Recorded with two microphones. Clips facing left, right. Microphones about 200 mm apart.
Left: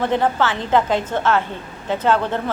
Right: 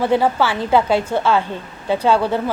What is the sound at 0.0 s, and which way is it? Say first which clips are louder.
A woman's voice: right 2 dB; 10° right (ahead or behind).